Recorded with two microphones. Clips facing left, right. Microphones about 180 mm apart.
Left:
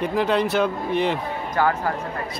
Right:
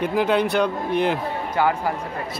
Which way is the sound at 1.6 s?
15° right (ahead or behind).